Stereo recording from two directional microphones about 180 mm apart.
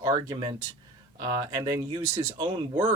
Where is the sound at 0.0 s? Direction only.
20° right (ahead or behind).